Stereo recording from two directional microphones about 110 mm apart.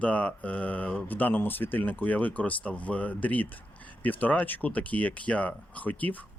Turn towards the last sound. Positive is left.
turn(degrees=15)  # may be behind; listen again after turning